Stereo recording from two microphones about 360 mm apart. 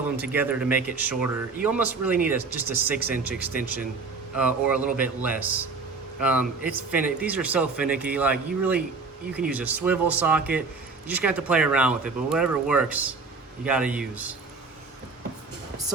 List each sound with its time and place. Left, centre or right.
0.2 s speech: centre